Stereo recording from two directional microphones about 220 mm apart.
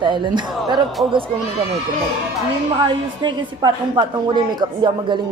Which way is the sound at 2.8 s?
20° right (ahead or behind).